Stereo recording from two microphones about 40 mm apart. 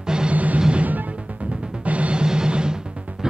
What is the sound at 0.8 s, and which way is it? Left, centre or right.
Music, right.